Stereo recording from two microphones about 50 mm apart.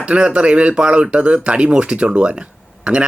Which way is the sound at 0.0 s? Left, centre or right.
Right.